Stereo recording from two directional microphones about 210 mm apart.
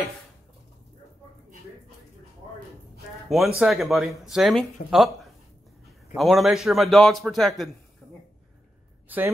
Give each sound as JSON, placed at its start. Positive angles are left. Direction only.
{"t": 3.3, "sound": "a man's voice", "side_deg": 0}
{"t": 8.0, "sound": "a sound", "side_deg": 0}
{"t": 9.1, "sound": "a woman's voice", "side_deg": -10}